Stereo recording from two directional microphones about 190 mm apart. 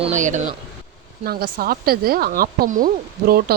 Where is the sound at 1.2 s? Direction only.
50° right (ahead or behind).